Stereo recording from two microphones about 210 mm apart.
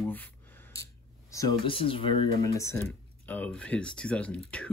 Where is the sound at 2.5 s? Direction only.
15° left (ahead or behind).